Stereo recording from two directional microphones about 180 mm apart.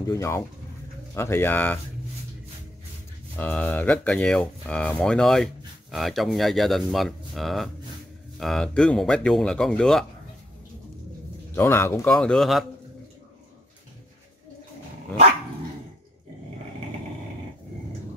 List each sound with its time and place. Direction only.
0.0 s speech: 15° left (ahead or behind)
3.3 s speech: 10° left (ahead or behind)
11.5 s speech: 10° left (ahead or behind)